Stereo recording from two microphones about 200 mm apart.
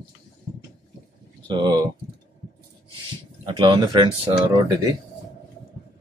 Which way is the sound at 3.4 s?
25° right (ahead or behind).